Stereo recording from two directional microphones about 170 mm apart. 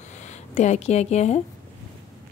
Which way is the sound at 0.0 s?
45° left (ahead or behind).